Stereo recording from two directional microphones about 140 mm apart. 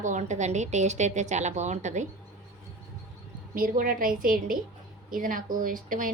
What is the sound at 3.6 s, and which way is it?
A woman's voice, 85° right.